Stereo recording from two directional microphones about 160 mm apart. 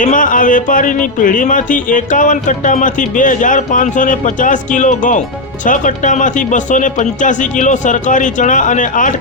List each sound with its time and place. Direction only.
0.0 s speech: 55° left (ahead or behind)